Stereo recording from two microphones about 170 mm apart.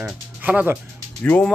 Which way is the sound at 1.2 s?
10° left (ahead or behind).